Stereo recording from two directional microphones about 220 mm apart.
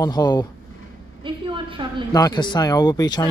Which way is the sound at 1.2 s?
20° right (ahead or behind).